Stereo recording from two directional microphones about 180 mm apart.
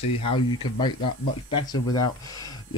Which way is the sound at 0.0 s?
30° left (ahead or behind).